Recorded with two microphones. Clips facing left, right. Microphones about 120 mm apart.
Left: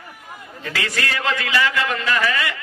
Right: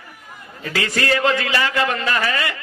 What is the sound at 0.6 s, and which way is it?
A man's voice, 30° right (ahead or behind).